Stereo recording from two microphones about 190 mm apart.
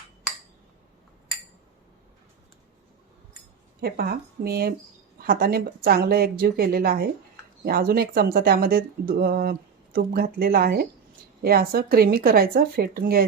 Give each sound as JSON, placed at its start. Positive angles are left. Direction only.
{"t": 3.8, "sound": "speech", "side_deg": -55}